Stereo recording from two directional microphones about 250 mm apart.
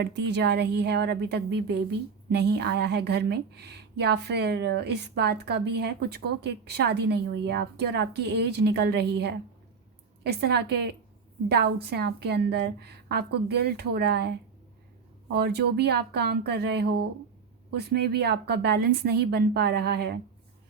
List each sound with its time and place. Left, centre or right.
0.0 s a woman's voice: right